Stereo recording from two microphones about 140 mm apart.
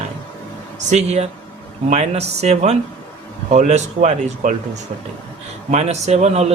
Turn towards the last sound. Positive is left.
turn(degrees=-50)  # may be behind; listen again after turning